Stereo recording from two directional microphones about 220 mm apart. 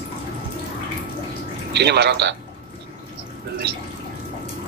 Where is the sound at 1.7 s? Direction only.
50° right (ahead or behind).